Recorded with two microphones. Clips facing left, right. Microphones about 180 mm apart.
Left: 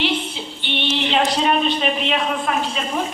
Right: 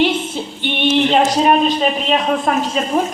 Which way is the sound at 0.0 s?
50° right (ahead or behind).